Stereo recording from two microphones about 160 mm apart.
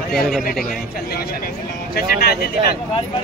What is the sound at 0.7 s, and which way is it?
Speech, 70° left (ahead or behind).